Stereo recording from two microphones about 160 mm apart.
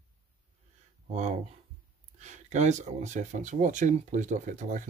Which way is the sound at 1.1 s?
45° right (ahead or behind).